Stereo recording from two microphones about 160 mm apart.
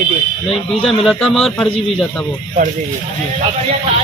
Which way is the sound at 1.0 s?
5° left (ahead or behind).